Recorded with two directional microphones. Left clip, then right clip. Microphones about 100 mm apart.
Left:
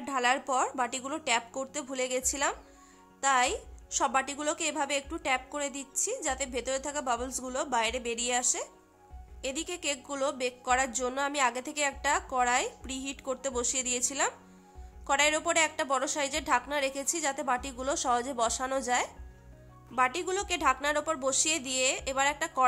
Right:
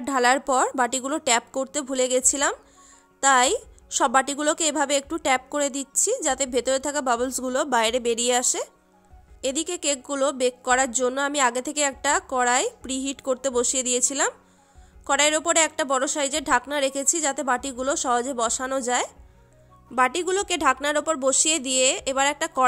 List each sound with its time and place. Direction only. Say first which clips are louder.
0.0 s a woman's voice: right 8 dB; 80° right; by 2.5 s 60° right (ahead or behind)
3.2 s a woman's voice: right 8 dB; 90° right
9.4 s a woman's voice: right 8 dB; 60° right (ahead or behind)
20.0 s a woman's voice: right 7 dB; 65° right (ahead or behind)